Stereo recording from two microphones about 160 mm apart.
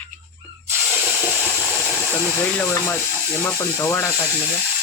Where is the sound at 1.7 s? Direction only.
10° right (ahead or behind).